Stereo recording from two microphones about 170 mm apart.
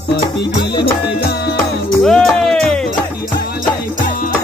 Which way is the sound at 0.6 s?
80° left.